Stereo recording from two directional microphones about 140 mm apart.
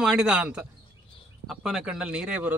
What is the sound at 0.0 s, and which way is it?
Speech, 5° right (ahead or behind).